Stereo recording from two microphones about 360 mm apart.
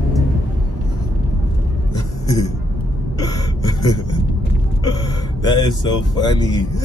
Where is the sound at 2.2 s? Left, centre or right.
Centre.